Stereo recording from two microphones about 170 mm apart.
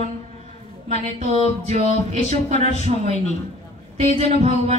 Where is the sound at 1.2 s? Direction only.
40° right (ahead or behind).